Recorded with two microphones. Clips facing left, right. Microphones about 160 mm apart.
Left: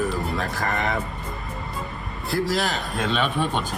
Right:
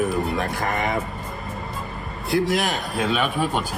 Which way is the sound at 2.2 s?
Centre (ahead or behind).